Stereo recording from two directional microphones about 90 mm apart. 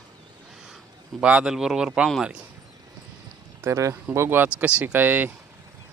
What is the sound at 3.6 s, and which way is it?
Speech, 35° right (ahead or behind).